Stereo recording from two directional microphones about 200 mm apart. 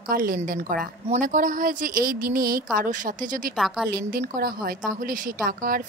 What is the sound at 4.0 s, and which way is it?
A woman's voice, 50° right (ahead or behind).